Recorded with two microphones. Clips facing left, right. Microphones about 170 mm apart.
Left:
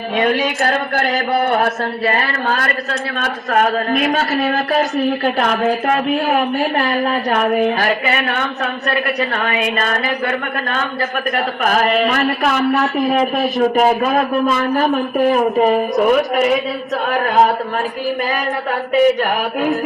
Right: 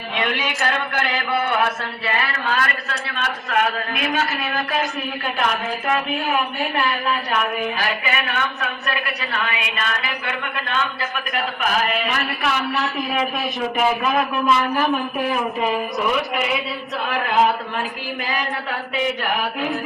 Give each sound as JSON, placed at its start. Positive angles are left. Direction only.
{"t": 0.2, "sound": "a man's voice", "side_deg": 40}
{"t": 18.9, "sound": "a woman's voice", "side_deg": 45}